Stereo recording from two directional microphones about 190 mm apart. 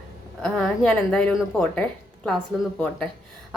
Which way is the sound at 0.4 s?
5° left (ahead or behind).